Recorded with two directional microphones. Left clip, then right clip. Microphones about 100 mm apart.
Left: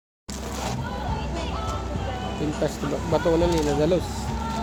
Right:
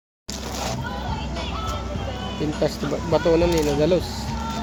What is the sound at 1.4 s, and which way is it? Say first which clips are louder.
Vehicle: right 1 dB; 25° right (ahead or behind).